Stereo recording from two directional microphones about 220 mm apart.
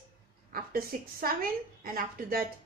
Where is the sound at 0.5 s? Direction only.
40° right (ahead or behind).